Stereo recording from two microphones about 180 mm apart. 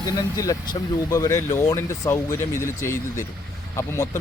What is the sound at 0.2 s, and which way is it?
Speech, 20° left (ahead or behind).